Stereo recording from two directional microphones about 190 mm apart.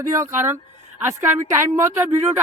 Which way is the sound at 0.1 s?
15° right (ahead or behind).